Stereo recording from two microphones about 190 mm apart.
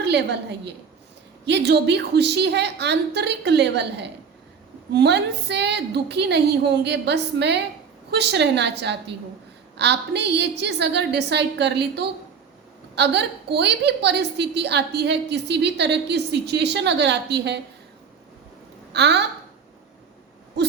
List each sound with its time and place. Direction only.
0.0 s a woman's voice: 65° right (ahead or behind)
18.9 s a woman's voice: 65° right (ahead or behind)